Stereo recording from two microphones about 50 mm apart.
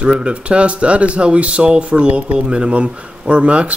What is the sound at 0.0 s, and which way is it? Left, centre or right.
Speech, right.